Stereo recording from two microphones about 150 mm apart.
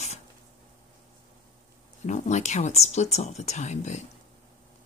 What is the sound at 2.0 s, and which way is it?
Speech, 50° left (ahead or behind).